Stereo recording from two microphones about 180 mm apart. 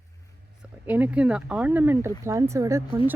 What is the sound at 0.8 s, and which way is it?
Speech, 10° right (ahead or behind).